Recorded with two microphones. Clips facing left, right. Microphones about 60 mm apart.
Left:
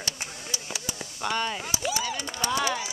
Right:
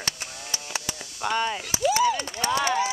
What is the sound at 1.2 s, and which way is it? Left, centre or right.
Speech, centre.